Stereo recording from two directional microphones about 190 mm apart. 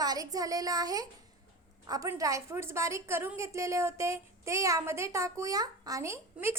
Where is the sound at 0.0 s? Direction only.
20° right (ahead or behind).